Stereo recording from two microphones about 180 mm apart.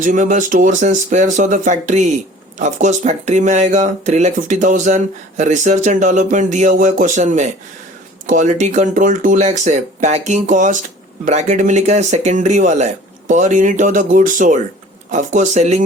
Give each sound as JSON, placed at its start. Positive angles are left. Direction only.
{"t": 0.0, "sound": "speech", "side_deg": -45}